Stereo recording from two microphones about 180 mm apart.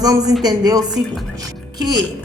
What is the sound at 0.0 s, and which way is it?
Speech, 20° right (ahead or behind).